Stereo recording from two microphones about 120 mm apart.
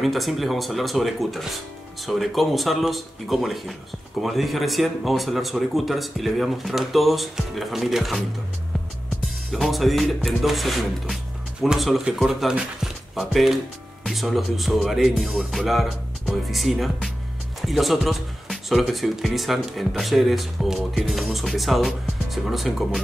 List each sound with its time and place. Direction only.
0.0 s speech: centre (ahead or behind)
9.5 s speech: centre (ahead or behind)